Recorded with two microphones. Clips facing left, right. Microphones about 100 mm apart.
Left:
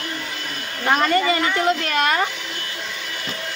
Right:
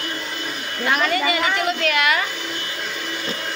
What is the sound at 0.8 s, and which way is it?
Speech, 35° left (ahead or behind).